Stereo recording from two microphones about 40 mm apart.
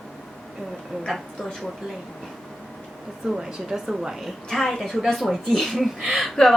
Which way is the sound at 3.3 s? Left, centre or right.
Centre.